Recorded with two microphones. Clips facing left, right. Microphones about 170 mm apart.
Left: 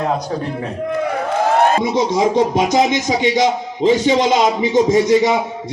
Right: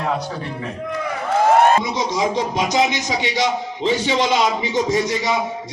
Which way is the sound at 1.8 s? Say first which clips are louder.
Left 6 dB; 55° left (ahead or behind).